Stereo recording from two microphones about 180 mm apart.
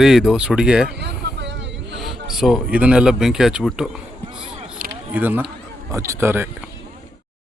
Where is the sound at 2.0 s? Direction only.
Centre (ahead or behind).